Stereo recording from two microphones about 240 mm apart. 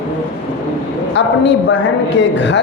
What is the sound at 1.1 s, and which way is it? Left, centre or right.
Speech, left.